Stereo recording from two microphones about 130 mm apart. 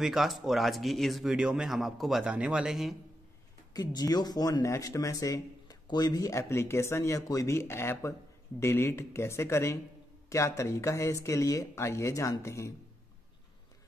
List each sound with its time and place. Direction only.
0.0 s speech: centre (ahead or behind)
3.7 s speech: 30° left (ahead or behind)